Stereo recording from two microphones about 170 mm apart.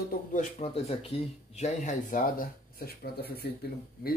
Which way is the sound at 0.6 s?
35° left (ahead or behind).